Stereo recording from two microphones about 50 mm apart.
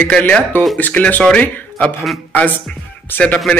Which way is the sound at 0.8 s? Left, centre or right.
Left.